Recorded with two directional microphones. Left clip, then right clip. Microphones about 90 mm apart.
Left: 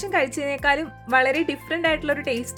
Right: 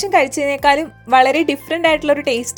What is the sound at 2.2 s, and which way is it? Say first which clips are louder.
Speech: right 8 dB; 35° right (ahead or behind).